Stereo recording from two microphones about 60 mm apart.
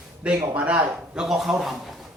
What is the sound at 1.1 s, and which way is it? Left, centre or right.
Speech, centre.